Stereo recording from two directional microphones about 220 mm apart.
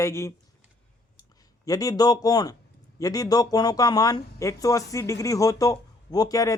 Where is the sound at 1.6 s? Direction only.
15° left (ahead or behind).